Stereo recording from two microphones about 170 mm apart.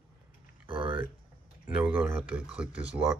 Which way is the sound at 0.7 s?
30° right (ahead or behind).